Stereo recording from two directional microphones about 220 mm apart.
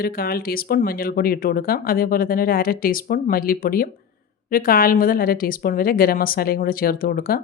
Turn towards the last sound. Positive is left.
turn(degrees=40)  # may be behind; listen again after turning